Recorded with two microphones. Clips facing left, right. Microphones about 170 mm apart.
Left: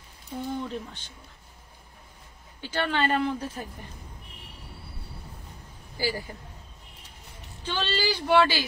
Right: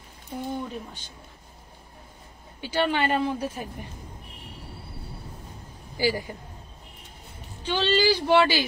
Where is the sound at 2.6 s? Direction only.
15° right (ahead or behind).